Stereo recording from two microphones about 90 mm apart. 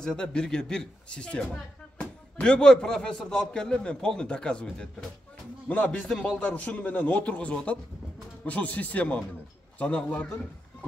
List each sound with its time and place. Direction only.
0.0 s speech: 10° left (ahead or behind)